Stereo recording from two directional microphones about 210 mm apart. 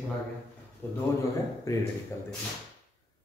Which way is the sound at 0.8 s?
10° left (ahead or behind).